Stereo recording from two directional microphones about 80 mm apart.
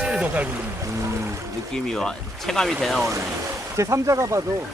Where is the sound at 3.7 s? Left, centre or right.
Right.